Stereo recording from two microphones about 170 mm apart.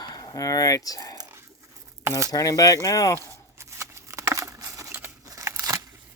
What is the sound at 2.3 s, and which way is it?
Speech, 20° left (ahead or behind).